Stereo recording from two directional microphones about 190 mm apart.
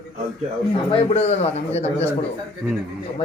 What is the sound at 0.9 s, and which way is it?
A man's voice, 30° left (ahead or behind).